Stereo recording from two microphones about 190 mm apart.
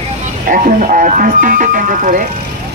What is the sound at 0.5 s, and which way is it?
Speech, 45° right (ahead or behind).